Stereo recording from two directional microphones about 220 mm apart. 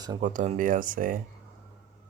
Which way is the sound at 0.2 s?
35° right (ahead or behind).